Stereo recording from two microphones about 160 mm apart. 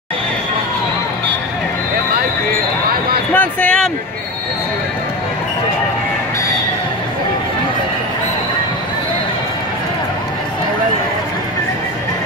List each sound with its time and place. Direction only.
3.3 s speech: 5° left (ahead or behind)